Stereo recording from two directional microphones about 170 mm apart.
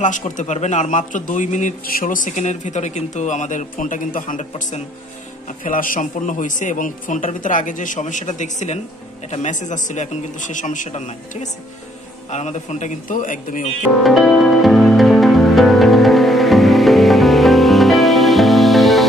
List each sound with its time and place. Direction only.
0.0 s speech: 45° left (ahead or behind)
12.3 s speech: 40° left (ahead or behind)
14.0 s music: centre (ahead or behind)